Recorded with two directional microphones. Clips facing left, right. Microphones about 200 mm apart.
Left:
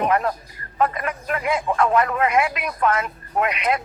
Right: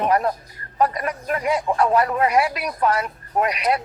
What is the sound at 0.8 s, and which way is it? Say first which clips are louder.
Speech: right 1 dB; 35° right (ahead or behind).